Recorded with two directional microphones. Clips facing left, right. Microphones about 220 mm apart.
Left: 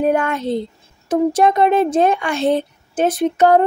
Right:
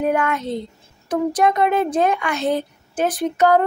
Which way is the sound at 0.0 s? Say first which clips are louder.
Left 3 dB; 30° left (ahead or behind).